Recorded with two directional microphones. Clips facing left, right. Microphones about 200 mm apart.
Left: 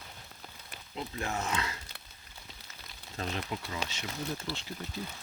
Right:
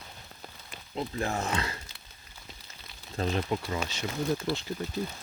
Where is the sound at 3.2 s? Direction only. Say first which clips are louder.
Right 7 dB; 40° right (ahead or behind).